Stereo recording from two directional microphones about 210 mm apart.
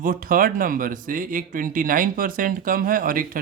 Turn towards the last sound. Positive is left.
turn(degrees=-40)  # may be behind; listen again after turning